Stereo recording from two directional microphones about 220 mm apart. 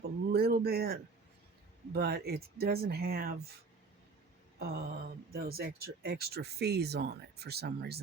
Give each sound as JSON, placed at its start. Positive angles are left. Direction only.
{"t": 0.3, "sound": "a sound", "side_deg": -45}
{"t": 1.9, "sound": "speech", "side_deg": -45}
{"t": 4.6, "sound": "speech", "side_deg": -45}